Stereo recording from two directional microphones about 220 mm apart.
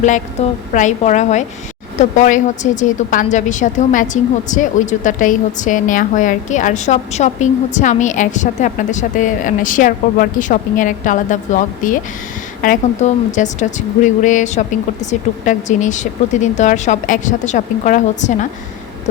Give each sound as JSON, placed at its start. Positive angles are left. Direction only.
{"t": 0.7, "sound": "a woman's voice", "side_deg": 35}